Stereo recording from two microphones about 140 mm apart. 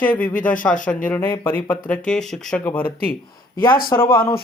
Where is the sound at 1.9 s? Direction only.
5° left (ahead or behind).